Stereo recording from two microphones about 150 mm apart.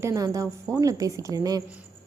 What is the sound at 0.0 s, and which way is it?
A woman's voice, 20° right (ahead or behind).